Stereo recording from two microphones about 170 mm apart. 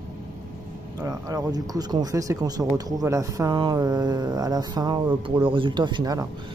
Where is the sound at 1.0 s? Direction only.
20° right (ahead or behind).